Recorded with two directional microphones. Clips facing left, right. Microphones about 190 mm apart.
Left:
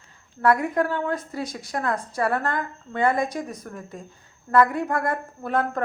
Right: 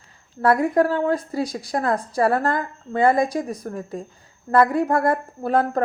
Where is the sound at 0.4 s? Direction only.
35° right (ahead or behind).